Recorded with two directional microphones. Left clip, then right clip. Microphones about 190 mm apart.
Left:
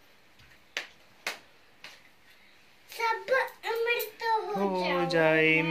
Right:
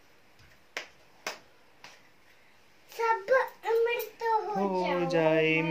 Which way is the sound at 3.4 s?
30° right (ahead or behind).